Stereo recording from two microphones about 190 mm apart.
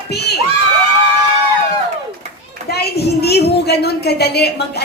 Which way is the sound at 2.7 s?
55° left (ahead or behind).